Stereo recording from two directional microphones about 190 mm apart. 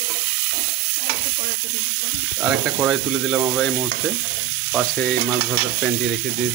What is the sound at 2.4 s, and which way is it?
Speech, 5° right (ahead or behind).